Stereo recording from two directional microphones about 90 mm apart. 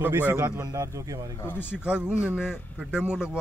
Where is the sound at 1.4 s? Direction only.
25° left (ahead or behind).